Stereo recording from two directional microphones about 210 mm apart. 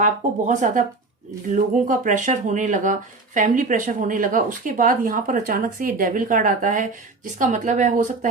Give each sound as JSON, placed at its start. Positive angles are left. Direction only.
{"t": 0.0, "sound": "speech", "side_deg": -35}